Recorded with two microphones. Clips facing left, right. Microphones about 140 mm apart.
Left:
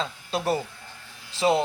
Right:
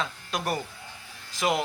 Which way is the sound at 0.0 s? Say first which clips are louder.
Left 3 dB; 30° left (ahead or behind).